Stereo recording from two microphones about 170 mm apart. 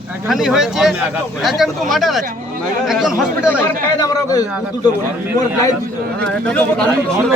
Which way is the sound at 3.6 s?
20° left (ahead or behind).